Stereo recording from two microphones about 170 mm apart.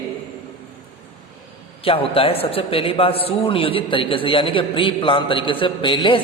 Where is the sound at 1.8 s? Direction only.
35° left (ahead or behind).